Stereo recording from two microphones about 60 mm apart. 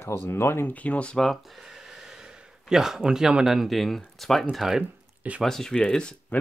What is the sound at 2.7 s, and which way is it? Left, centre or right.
Speech, centre.